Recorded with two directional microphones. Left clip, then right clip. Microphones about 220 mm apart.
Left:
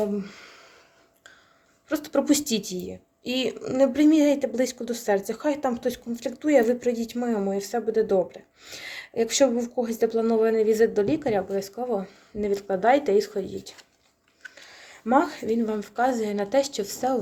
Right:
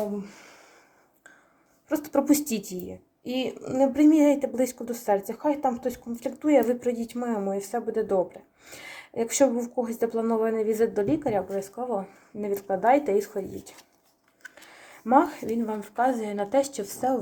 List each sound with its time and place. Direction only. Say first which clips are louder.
0.2 s gasp: left 3 dB; 20° left (ahead or behind)
1.9 s speech: even; 5° left (ahead or behind)